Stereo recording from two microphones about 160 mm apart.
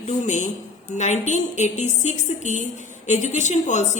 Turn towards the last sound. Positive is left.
turn(degrees=45)  # may be behind; listen again after turning